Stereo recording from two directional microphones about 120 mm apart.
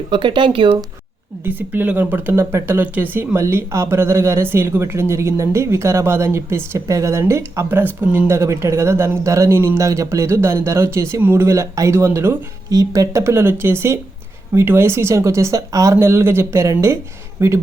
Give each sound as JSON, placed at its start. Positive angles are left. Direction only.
{"t": 0.1, "sound": "speech", "side_deg": -40}
{"t": 1.5, "sound": "speech", "side_deg": -15}
{"t": 8.3, "sound": "speech", "side_deg": -25}
{"t": 12.7, "sound": "speech", "side_deg": -30}